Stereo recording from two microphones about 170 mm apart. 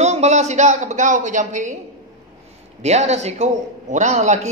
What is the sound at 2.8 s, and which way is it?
A man's voice, 40° right (ahead or behind).